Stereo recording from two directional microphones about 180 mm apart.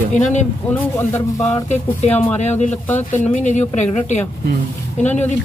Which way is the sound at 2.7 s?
10° left (ahead or behind).